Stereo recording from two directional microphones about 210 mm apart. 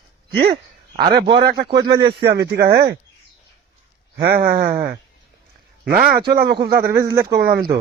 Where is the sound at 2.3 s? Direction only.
50° right (ahead or behind).